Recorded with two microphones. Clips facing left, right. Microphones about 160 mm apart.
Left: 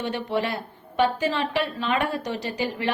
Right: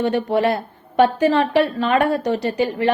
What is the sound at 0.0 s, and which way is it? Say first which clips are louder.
A woman's voice: right 8 dB; 50° right (ahead or behind).